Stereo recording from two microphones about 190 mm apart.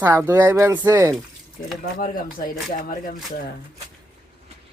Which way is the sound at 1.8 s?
45° left (ahead or behind).